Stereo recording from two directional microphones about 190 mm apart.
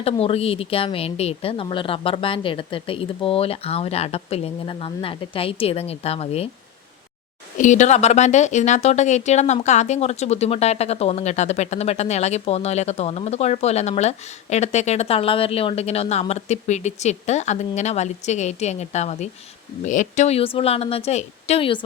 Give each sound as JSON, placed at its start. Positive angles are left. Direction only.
{"t": 0.0, "sound": "a woman's voice", "side_deg": 30}
{"t": 7.6, "sound": "speech", "side_deg": 40}